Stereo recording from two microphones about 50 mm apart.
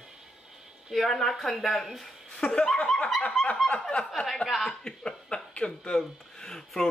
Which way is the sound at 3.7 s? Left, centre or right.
Left.